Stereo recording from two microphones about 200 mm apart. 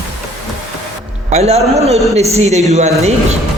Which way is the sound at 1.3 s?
30° right (ahead or behind).